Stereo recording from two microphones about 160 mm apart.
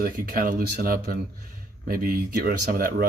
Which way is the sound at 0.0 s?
65° right (ahead or behind).